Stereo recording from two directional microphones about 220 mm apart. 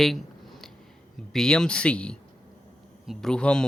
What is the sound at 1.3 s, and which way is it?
Speech, centre (ahead or behind).